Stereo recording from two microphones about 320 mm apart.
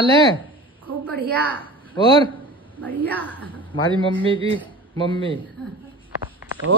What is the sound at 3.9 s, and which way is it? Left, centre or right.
Speech, centre.